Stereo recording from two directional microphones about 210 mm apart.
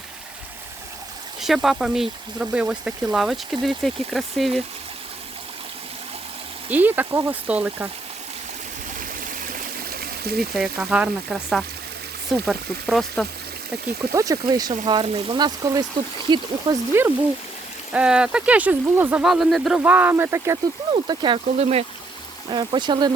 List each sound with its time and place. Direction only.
1.4 s speech: centre (ahead or behind)
6.7 s speech: 10° right (ahead or behind)
9.0 s stream: 40° right (ahead or behind)
10.5 s speech: centre (ahead or behind)
14.0 s speech: 15° right (ahead or behind)
17.9 s speech: 5° right (ahead or behind); by 23.1 s 20° right (ahead or behind)